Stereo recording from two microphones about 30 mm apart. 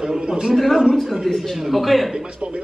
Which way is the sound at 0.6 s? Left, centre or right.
Centre.